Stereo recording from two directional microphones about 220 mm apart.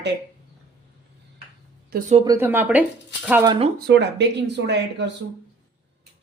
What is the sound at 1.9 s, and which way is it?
Speech, 35° right (ahead or behind).